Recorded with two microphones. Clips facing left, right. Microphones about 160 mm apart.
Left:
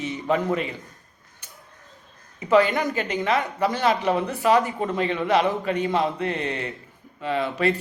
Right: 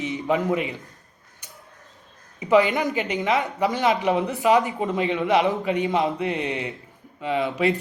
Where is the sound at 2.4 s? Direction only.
15° right (ahead or behind).